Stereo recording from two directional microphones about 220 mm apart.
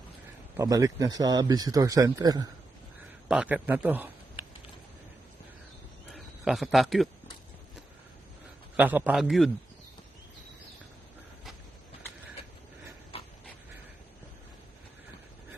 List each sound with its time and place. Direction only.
0.5 s speech: 15° right (ahead or behind)
3.2 s a man's voice: 5° right (ahead or behind)
6.1 s a man's voice: centre (ahead or behind)
8.7 s speech: 10° right (ahead or behind)
13.1 s dog: 25° left (ahead or behind)